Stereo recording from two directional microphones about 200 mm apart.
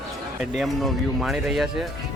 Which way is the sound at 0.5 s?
Centre (ahead or behind).